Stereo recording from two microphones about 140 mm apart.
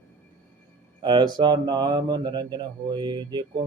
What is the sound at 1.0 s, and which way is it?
Mantra, 30° right (ahead or behind).